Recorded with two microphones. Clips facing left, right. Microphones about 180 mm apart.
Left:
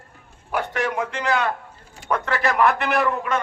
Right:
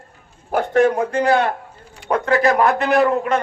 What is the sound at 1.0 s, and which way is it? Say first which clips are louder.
Speech: right 6 dB; 30° right (ahead or behind).